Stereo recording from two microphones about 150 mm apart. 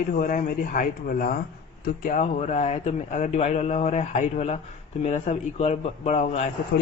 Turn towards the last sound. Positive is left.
turn(degrees=50)  # may be behind; listen again after turning